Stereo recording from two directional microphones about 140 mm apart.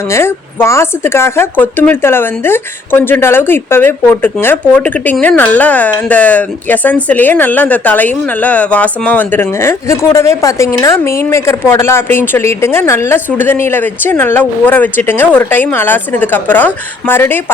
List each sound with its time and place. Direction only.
0.1 s speech: 20° left (ahead or behind)